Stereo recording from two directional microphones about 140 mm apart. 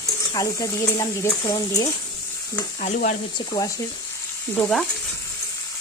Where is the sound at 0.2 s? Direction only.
25° left (ahead or behind).